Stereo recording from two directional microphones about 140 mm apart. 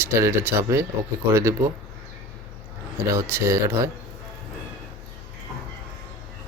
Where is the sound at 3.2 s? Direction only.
20° right (ahead or behind).